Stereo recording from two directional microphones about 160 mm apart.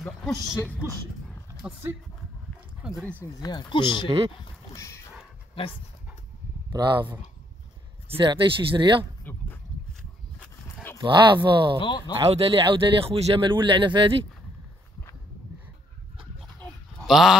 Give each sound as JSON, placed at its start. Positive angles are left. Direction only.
{"t": 0.3, "sound": "speech", "side_deg": 15}
{"t": 1.6, "sound": "speech", "side_deg": -10}
{"t": 2.8, "sound": "speech", "side_deg": 0}
{"t": 3.4, "sound": "speech", "side_deg": 30}
{"t": 4.7, "sound": "speech", "side_deg": 20}
{"t": 6.7, "sound": "speech", "side_deg": -25}
{"t": 8.2, "sound": "speech", "side_deg": -30}
{"t": 9.2, "sound": "a sound", "side_deg": 10}
{"t": 11.0, "sound": "speech", "side_deg": -30}
{"t": 16.5, "sound": "sheep", "side_deg": 0}